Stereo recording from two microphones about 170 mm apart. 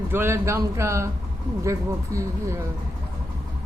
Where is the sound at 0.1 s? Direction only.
15° right (ahead or behind).